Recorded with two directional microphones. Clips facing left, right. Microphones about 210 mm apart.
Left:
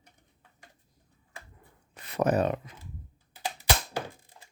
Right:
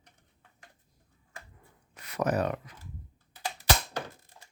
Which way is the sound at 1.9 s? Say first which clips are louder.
Left 3 dB; 30° left (ahead or behind).